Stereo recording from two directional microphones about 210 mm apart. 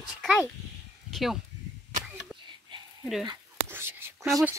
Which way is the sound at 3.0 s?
Centre (ahead or behind).